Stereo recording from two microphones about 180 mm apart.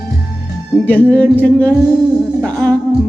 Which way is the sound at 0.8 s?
10° left (ahead or behind).